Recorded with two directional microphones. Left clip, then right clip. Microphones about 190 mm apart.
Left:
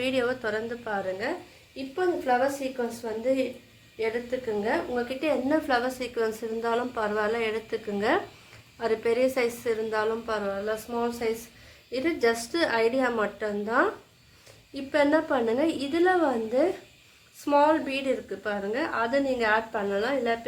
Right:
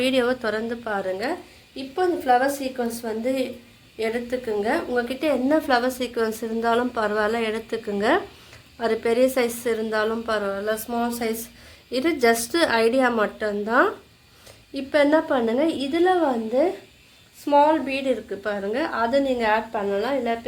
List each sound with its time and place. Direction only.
0.0 s a woman's voice: 30° right (ahead or behind)
19.4 s a woman's voice: 15° right (ahead or behind)